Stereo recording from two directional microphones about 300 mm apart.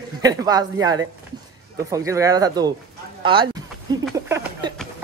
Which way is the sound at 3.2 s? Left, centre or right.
Centre.